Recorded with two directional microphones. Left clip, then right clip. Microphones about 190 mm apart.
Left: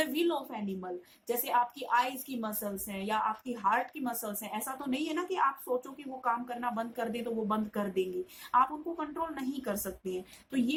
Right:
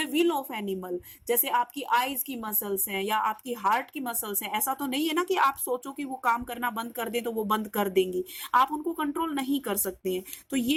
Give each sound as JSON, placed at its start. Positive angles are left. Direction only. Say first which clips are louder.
{"t": 0.0, "sound": "a woman's voice", "louder": "right 5 dB", "side_deg": -25}